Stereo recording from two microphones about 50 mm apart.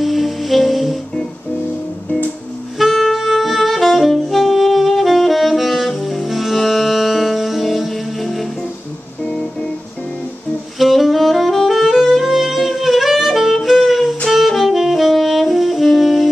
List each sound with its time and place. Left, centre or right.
0.0 s music: centre
2.8 s saxophone: centre
9.2 s music: centre
10.8 s saxophone: centre